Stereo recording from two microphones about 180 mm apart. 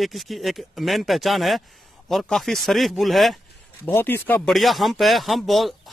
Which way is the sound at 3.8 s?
10° left (ahead or behind).